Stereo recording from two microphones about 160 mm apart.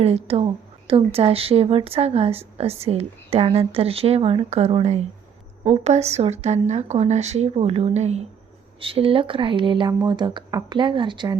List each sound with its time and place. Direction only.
0.0 s speech: 40° right (ahead or behind)
8.8 s speech: 35° right (ahead or behind)